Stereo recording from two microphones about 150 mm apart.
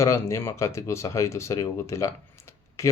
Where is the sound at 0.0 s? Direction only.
20° left (ahead or behind).